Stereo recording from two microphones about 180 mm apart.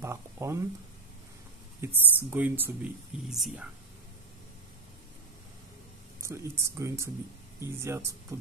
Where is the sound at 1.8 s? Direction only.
10° right (ahead or behind).